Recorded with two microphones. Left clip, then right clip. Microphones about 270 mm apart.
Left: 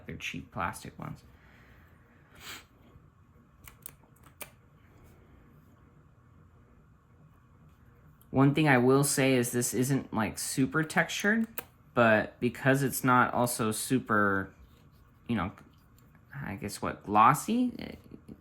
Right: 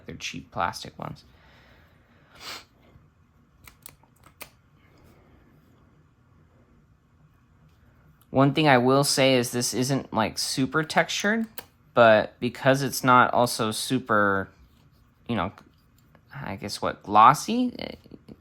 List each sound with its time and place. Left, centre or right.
0.0 s speech: centre
2.3 s a sound: centre
8.3 s speech: centre